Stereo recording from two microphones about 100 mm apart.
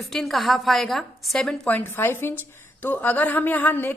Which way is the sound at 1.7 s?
25° left (ahead or behind).